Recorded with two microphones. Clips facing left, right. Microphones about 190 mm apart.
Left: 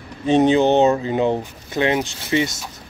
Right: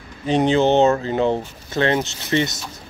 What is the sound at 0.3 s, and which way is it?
Speech, 20° left (ahead or behind).